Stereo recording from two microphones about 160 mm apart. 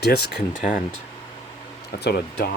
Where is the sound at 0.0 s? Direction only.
90° left.